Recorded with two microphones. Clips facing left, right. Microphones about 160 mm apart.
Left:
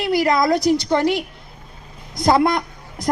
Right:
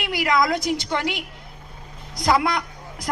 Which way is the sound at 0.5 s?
20° right (ahead or behind).